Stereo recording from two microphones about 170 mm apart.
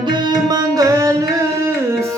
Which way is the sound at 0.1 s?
25° right (ahead or behind).